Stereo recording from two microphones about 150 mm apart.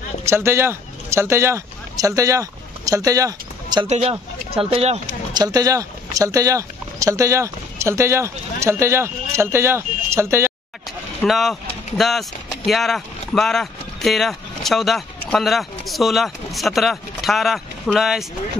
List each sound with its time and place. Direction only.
0.2 s speech: 15° right (ahead or behind)
3.8 s speech: 45° right (ahead or behind)
5.3 s speech: 25° right (ahead or behind)
11.2 s speech: centre (ahead or behind)